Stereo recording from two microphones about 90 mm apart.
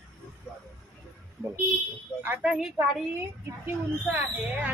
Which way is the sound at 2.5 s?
5° right (ahead or behind).